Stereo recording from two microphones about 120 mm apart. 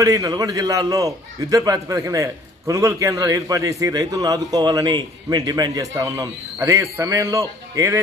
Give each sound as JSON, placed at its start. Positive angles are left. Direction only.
{"t": 0.0, "sound": "a man's voice", "side_deg": -30}